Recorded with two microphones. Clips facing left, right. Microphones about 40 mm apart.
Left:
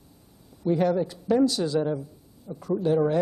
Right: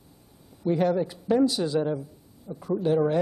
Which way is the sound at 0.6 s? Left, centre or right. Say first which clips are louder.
Even; centre.